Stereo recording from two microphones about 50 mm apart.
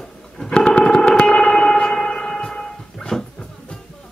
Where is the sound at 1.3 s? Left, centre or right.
Centre.